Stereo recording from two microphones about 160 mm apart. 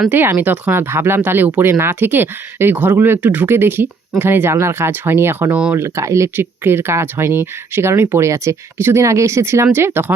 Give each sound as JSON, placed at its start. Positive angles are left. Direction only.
{"t": 0.1, "sound": "speech", "side_deg": -15}